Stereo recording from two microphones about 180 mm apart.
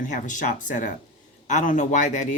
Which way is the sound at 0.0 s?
45° left (ahead or behind).